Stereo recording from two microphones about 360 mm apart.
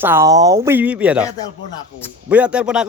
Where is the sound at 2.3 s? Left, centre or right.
Centre.